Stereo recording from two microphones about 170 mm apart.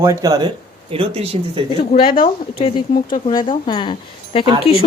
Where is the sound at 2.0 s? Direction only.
60° left (ahead or behind).